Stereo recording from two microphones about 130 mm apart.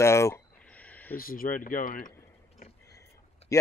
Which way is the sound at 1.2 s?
90° left.